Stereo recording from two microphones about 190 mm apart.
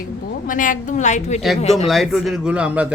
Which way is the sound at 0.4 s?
45° left (ahead or behind).